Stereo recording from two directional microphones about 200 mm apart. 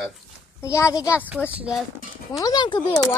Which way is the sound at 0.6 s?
15° left (ahead or behind).